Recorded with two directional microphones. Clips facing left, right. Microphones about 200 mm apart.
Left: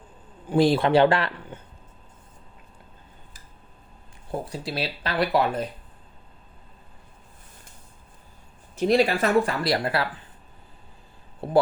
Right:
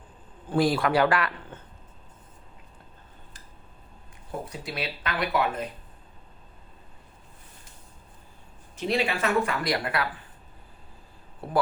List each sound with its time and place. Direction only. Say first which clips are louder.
0.5 s speech: left 4 dB; 25° left (ahead or behind)
1.5 s a sound: left 3 dB; 15° left (ahead or behind)
4.3 s speech: left 4 dB; 30° left (ahead or behind)
8.8 s speech: left 6 dB; 40° left (ahead or behind)
11.4 s speech: left 5 dB; 25° left (ahead or behind)